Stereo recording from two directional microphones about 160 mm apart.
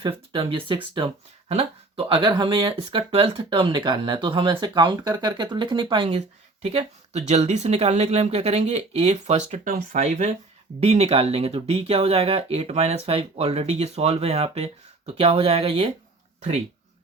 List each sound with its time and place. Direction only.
0.0 s speech: 30° right (ahead or behind)